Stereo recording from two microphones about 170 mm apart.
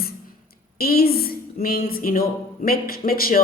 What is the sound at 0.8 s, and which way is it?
A woman's voice, 60° left (ahead or behind).